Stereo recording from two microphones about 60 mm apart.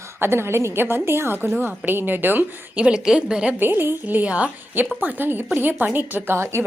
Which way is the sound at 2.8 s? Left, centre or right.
Centre.